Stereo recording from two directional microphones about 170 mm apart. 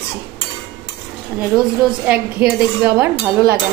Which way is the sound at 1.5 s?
10° right (ahead or behind).